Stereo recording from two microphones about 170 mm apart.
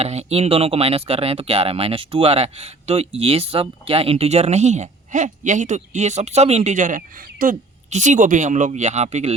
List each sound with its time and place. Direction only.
0.0 s speech: 40° right (ahead or behind)